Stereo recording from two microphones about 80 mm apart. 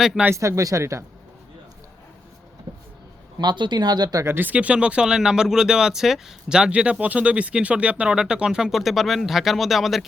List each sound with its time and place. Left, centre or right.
0.3 s speech: right
2.7 s vehicle: right
3.3 s speech: right
4.2 s speech: right; by 10.1 s centre